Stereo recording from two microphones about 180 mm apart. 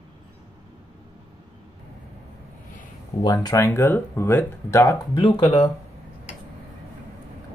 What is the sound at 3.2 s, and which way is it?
Speech, 20° left (ahead or behind).